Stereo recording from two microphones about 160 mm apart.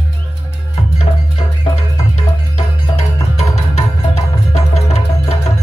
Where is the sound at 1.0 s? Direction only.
40° left (ahead or behind).